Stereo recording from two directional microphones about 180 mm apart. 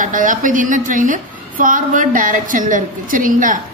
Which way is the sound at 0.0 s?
45° right (ahead or behind).